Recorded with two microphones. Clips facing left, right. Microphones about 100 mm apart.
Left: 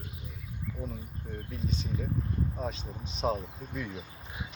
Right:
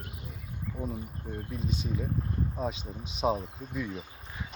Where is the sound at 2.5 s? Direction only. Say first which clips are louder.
Right 2 dB; 10° right (ahead or behind).